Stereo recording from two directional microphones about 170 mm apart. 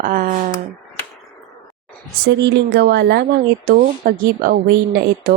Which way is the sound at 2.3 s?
90° right.